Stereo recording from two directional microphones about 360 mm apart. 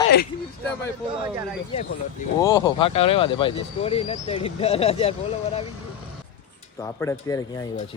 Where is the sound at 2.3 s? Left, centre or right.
Centre.